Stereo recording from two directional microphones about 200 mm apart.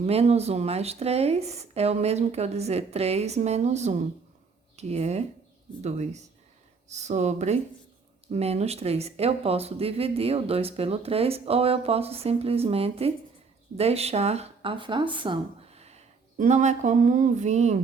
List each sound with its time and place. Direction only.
0.0 s speech: 30° right (ahead or behind)